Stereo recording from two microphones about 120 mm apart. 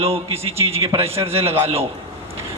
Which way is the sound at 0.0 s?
55° right (ahead or behind).